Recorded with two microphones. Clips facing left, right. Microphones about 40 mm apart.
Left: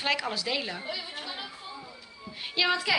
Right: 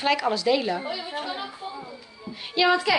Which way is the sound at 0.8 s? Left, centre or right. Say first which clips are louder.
Right 6 dB; centre.